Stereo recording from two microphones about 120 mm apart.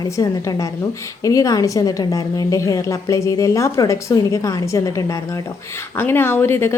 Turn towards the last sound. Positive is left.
turn(degrees=20)  # may be behind; listen again after turning